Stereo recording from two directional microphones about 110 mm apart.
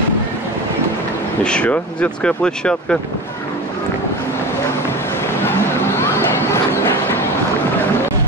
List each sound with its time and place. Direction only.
1.4 s speech: 10° left (ahead or behind)
5.4 s a sound: 20° left (ahead or behind)
6.5 s train: 20° left (ahead or behind)